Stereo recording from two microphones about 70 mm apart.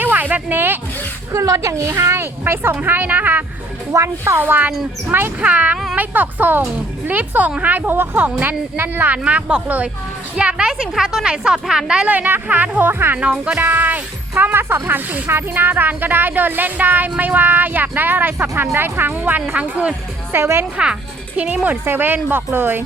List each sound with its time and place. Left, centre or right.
0.0 s a sound: right
1.3 s a woman's voice: right
3.9 s a woman's voice: right; by 12.1 s centre
12.1 s speech: right
12.9 s a woman's voice: right
20.3 s a woman's voice: right
20.7 s a woman's voice: centre; by 22.8 s right